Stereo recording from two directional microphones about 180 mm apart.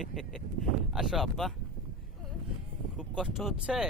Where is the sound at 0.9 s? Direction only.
Centre (ahead or behind).